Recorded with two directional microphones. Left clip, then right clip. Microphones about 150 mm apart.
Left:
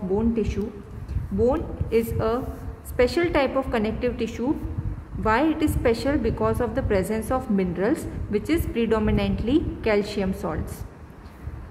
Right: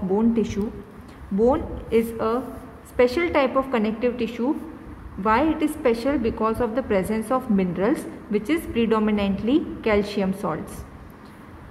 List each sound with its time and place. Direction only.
0.1 s a woman's voice: 15° right (ahead or behind)
2.1 s a woman's voice: centre (ahead or behind)